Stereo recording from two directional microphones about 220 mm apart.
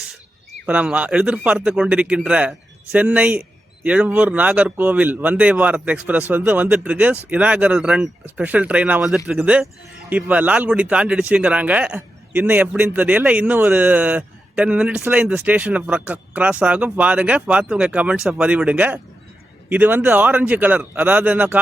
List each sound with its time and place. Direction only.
0.6 s speech: 5° right (ahead or behind)